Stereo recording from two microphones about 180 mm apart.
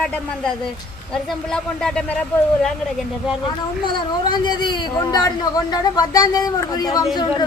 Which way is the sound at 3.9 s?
25° left (ahead or behind).